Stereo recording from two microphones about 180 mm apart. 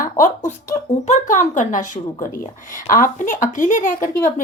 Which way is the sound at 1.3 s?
45° left (ahead or behind).